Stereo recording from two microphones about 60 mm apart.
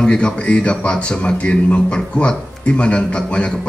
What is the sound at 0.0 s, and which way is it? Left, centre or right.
Speech, centre.